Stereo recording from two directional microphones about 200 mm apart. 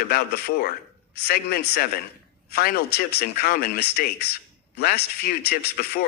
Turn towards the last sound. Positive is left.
turn(degrees=55)  # may be behind; listen again after turning